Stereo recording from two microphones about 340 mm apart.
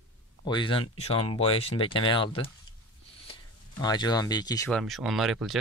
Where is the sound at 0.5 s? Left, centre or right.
Centre.